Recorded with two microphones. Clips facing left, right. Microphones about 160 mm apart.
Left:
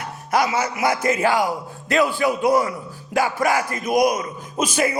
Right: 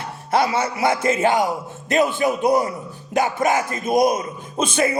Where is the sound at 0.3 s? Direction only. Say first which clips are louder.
Right 1 dB; 30° right (ahead or behind).